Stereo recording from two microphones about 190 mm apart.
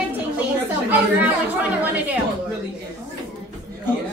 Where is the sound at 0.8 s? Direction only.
10° right (ahead or behind).